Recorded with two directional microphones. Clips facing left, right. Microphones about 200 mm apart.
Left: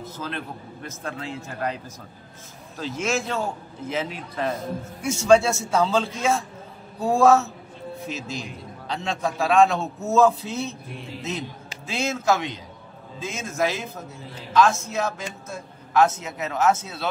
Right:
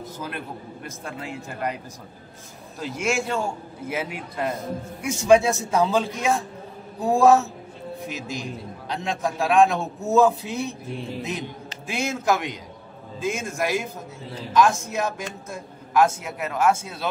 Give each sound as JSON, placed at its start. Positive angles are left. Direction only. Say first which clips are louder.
{"t": 0.0, "sound": "a sound", "louder": "even", "side_deg": -15}
{"t": 0.8, "sound": "a man's voice", "louder": "left 2 dB", "side_deg": -15}
{"t": 2.8, "sound": "a man's voice", "louder": "even", "side_deg": -15}
{"t": 11.9, "sound": "a man's voice", "louder": "even", "side_deg": -15}